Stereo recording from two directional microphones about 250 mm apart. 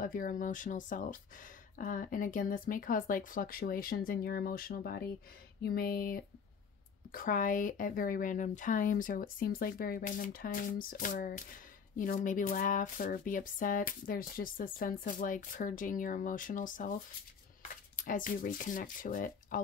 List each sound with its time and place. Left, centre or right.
0.0 s speech: left